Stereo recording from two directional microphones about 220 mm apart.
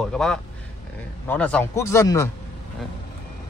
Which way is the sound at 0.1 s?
5° left (ahead or behind).